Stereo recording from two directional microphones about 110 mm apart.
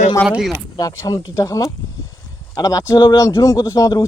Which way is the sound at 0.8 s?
35° left (ahead or behind).